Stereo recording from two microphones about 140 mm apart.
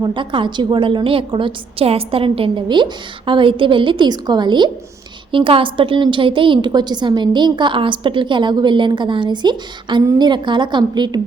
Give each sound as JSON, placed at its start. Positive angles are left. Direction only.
{"t": 0.0, "sound": "a woman's voice", "side_deg": -35}